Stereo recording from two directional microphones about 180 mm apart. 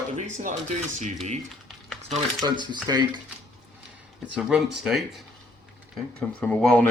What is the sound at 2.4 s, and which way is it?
Speech, 25° right (ahead or behind).